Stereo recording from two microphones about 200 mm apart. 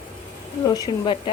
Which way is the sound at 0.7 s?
20° left (ahead or behind).